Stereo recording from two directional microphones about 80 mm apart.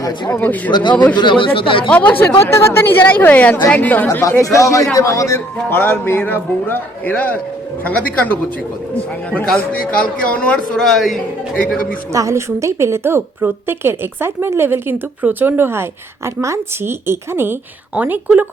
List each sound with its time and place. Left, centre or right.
0.3 s a man's voice: left
0.7 s a man's voice: left
1.9 s a man's voice: centre
2.5 s a man's voice: left
4.2 s a man's voice: left
5.6 s a man's voice: left
9.5 s a man's voice: centre
10.8 s speech: centre
11.5 s a man's voice: centre
12.1 s a woman's voice: right; by 18.4 s centre